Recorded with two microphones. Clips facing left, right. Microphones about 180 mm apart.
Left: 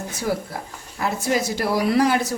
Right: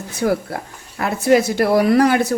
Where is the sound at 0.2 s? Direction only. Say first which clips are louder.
Right 7 dB; 60° right (ahead or behind).